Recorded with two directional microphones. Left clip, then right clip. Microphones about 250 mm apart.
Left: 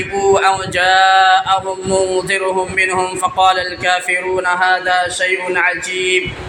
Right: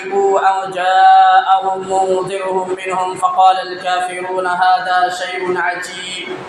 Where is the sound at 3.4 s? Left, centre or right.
Left.